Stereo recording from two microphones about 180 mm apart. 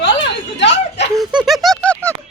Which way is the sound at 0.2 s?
80° left.